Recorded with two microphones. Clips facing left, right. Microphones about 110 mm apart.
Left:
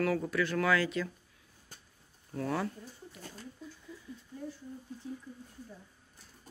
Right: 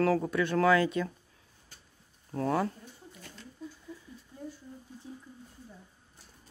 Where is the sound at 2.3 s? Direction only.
30° right (ahead or behind).